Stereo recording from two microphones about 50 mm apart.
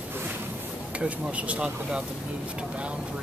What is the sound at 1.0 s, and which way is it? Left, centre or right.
Speech, right.